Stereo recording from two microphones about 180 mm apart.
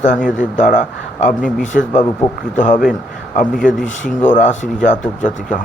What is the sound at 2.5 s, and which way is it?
Speech, 45° left (ahead or behind).